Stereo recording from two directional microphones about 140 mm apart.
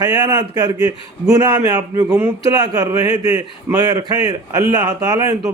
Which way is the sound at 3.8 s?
30° right (ahead or behind).